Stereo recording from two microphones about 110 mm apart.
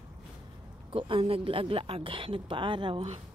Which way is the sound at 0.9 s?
55° right (ahead or behind).